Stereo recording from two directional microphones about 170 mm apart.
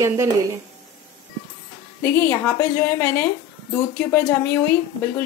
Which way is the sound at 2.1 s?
15° left (ahead or behind).